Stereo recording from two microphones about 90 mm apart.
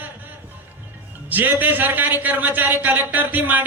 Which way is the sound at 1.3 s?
20° right (ahead or behind).